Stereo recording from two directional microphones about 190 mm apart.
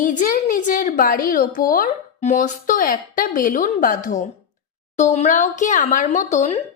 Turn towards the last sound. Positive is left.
turn(degrees=40)  # may be behind; listen again after turning